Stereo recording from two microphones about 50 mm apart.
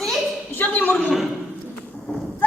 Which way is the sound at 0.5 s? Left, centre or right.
Left.